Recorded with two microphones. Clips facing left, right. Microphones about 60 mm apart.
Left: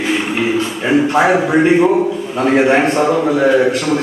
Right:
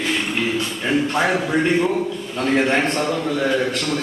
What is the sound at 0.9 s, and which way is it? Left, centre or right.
A man's voice, centre.